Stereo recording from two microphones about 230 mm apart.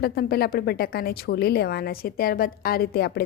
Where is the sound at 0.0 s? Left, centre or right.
Left.